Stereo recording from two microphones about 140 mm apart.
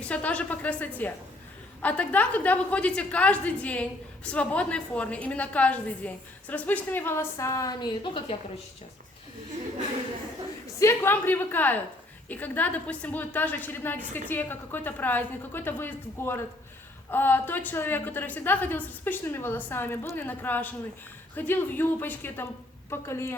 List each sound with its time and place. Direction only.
0.0 s a woman's voice: 10° left (ahead or behind); by 8.4 s 30° left (ahead or behind)
10.8 s a woman's voice: 15° left (ahead or behind)